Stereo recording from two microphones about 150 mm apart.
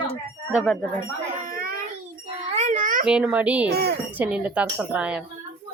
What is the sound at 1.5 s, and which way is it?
Baby cry, 70° right (ahead or behind).